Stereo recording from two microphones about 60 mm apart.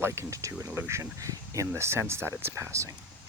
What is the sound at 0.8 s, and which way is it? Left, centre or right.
Speech, right.